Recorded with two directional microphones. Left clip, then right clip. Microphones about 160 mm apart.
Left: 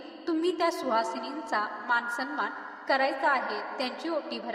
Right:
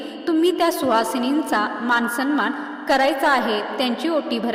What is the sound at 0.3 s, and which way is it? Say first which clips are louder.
A woman's voice: right 9 dB; 55° right (ahead or behind).